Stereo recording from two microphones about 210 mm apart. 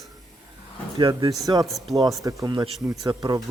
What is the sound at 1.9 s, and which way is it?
A man's voice, 15° right (ahead or behind).